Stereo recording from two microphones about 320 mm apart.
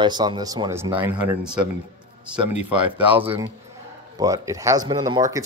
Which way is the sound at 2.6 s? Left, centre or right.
Centre.